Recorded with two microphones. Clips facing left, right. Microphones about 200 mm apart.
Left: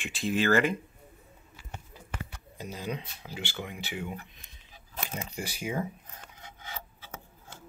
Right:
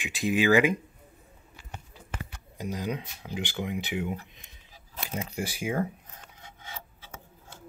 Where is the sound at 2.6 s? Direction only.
15° right (ahead or behind).